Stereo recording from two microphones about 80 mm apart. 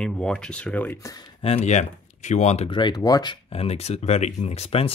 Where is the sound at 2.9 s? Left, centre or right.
Left.